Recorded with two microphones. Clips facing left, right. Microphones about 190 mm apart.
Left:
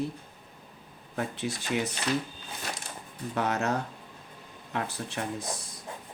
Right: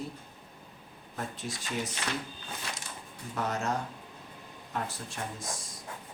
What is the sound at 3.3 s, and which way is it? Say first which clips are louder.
Speech: left 3 dB; 65° left (ahead or behind).